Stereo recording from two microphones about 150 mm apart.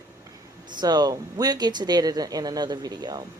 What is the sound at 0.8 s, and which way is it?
Speech, 30° right (ahead or behind).